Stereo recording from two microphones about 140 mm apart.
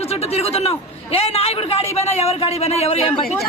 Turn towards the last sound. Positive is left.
turn(degrees=45)  # may be behind; listen again after turning